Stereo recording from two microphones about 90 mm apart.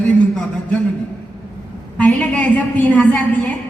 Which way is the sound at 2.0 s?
15° left (ahead or behind).